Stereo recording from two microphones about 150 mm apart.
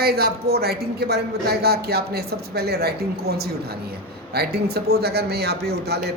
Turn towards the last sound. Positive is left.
turn(degrees=-90)